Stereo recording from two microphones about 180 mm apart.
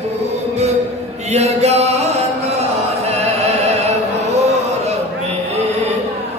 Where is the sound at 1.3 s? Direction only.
40° right (ahead or behind).